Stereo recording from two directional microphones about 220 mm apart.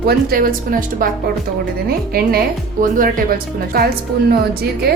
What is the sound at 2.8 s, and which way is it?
A woman's voice, 40° right (ahead or behind).